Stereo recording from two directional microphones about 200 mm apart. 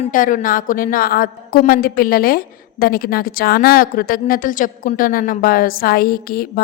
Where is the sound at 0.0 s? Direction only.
40° left (ahead or behind).